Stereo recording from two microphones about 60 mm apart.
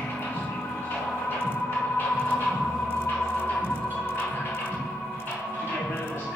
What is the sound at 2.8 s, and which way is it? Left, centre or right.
Organ, left.